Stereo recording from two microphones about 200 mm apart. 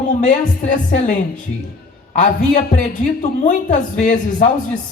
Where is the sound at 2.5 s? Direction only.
40° left (ahead or behind).